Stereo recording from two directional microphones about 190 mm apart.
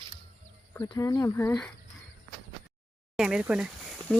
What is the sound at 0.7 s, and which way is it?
Speech, 15° left (ahead or behind).